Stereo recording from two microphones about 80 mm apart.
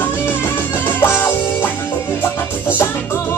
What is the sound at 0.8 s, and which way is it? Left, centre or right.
Music, left.